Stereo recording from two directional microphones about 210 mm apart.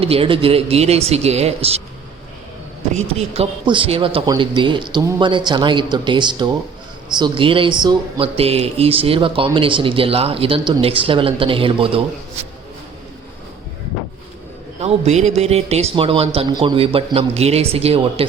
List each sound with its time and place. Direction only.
0.0 s speech: 25° right (ahead or behind)
2.9 s speech: 30° right (ahead or behind)
14.8 s speech: 30° right (ahead or behind)